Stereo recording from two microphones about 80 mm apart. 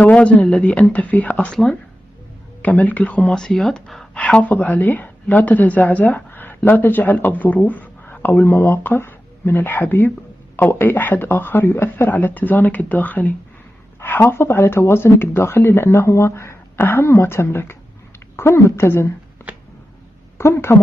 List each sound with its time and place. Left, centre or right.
0.0 s speech: centre
4.1 s a woman's voice: centre; by 19.1 s left
19.4 s a sound: left
20.3 s speech: left